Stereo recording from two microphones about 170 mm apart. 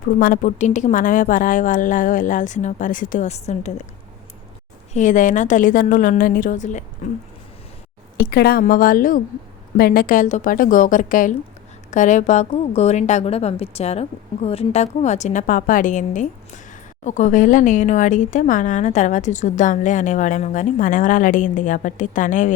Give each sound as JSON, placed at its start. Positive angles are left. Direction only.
{"t": 0.2, "sound": "speech", "side_deg": 50}
{"t": 4.9, "sound": "speech", "side_deg": 50}
{"t": 8.2, "sound": "a woman's voice", "side_deg": 70}